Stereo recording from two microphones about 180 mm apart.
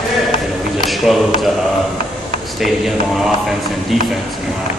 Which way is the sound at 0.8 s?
Centre (ahead or behind).